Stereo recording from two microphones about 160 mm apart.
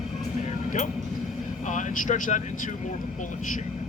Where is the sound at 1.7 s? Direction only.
50° left (ahead or behind).